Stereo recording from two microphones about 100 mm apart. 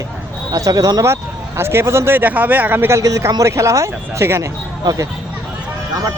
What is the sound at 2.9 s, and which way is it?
Speech, 30° right (ahead or behind).